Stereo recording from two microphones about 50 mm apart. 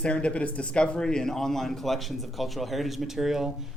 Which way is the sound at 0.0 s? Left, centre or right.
Left.